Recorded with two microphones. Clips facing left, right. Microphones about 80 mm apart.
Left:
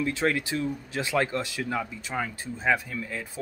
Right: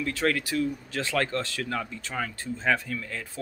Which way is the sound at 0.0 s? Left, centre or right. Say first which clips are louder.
Left 1 dB; left.